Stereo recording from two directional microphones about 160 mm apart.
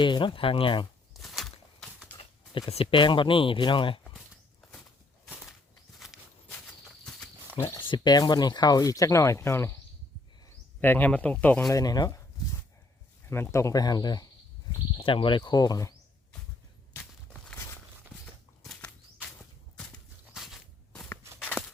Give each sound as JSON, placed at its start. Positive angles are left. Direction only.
{"t": 0.0, "sound": "speech", "side_deg": 30}
{"t": 1.1, "sound": "walk", "side_deg": 0}
{"t": 2.1, "sound": "a sound", "side_deg": 10}
{"t": 2.6, "sound": "speech", "side_deg": 35}
{"t": 5.2, "sound": "a sound", "side_deg": 0}
{"t": 6.0, "sound": "walk", "side_deg": 0}
{"t": 7.6, "sound": "speech", "side_deg": 15}
{"t": 7.9, "sound": "speech", "side_deg": 25}
{"t": 10.8, "sound": "speech", "side_deg": 10}
{"t": 11.8, "sound": "speech", "side_deg": 25}
{"t": 13.3, "sound": "speech", "side_deg": 15}
{"t": 16.9, "sound": "a sound", "side_deg": 5}
{"t": 18.6, "sound": "horse", "side_deg": 0}
{"t": 19.7, "sound": "walk", "side_deg": 0}